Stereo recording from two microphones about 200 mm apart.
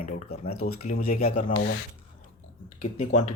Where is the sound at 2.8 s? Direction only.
35° left (ahead or behind).